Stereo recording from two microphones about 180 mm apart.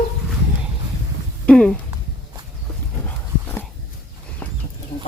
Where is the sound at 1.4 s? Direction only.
5° left (ahead or behind).